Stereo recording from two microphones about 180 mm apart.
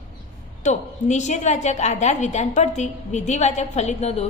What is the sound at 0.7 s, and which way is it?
A woman's voice, 40° left (ahead or behind).